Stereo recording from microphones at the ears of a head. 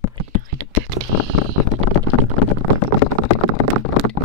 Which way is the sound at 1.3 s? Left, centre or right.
Left.